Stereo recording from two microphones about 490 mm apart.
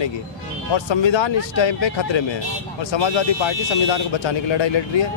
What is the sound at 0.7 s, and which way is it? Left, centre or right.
Speech, left.